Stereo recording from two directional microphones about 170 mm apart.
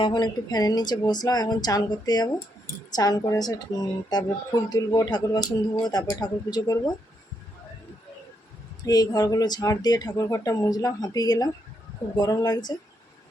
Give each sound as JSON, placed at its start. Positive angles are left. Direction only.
{"t": 0.0, "sound": "speech", "side_deg": 25}
{"t": 8.8, "sound": "speech", "side_deg": 20}